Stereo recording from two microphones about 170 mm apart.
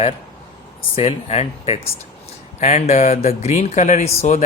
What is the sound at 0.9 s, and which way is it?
Speech, 35° left (ahead or behind).